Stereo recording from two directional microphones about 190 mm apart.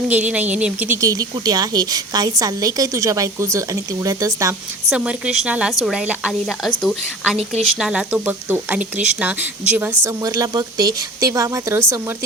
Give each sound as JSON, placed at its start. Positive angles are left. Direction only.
{"t": 0.1, "sound": "speech", "side_deg": -5}
{"t": 4.9, "sound": "a woman's voice", "side_deg": -5}